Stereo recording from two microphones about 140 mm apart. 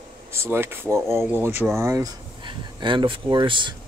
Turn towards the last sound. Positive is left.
turn(degrees=-35)  # may be behind; listen again after turning